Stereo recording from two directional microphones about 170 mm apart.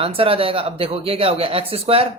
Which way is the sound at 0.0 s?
30° right (ahead or behind).